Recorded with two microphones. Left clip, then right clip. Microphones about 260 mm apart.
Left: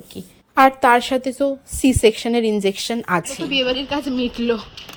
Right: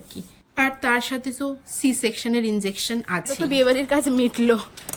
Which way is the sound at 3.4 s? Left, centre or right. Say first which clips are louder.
Right 1 dB; centre.